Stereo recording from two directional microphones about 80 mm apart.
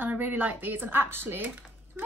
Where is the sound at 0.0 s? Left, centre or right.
Right.